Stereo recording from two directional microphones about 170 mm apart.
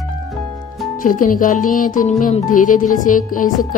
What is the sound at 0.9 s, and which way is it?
Speech, 50° left (ahead or behind).